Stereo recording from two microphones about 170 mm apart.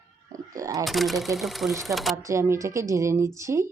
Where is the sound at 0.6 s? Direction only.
20° right (ahead or behind).